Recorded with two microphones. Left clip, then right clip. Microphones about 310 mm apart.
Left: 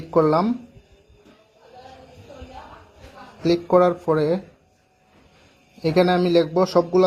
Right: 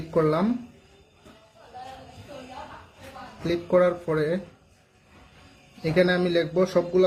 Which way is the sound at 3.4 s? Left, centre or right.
Left.